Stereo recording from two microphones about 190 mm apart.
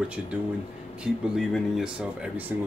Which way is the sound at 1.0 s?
5° right (ahead or behind).